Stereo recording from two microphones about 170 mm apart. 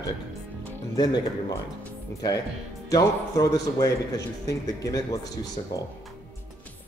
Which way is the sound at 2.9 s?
20° left (ahead or behind).